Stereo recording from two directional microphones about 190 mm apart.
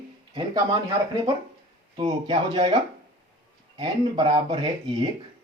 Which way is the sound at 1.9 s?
25° right (ahead or behind).